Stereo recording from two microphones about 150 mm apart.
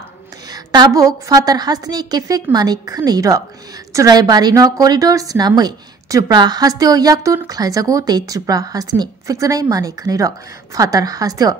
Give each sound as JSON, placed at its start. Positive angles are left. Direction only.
{"t": 0.5, "sound": "a woman's voice", "side_deg": -25}